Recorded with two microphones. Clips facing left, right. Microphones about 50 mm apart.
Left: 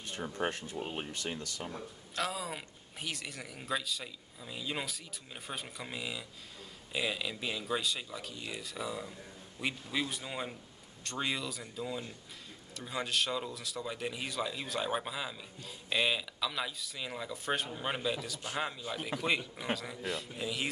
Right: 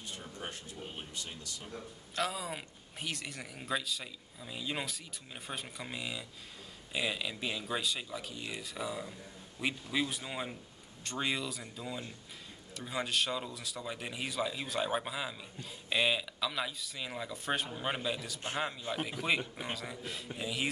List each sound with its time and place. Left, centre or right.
0.0 s speech: left
2.1 s speech: centre